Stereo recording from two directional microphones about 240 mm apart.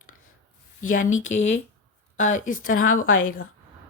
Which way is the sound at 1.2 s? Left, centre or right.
Left.